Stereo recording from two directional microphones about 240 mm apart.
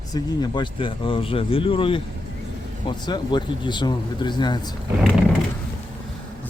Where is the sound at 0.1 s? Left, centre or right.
Centre.